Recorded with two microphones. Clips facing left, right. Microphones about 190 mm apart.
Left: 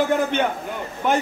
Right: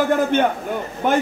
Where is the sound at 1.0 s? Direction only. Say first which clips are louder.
Right 2 dB; 50° right (ahead or behind).